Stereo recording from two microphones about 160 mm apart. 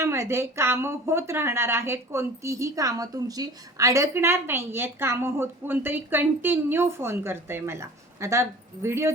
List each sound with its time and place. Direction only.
0.0 s speech: 15° right (ahead or behind)